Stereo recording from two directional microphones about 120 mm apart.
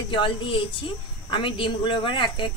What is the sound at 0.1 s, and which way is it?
A woman's voice, 45° left (ahead or behind).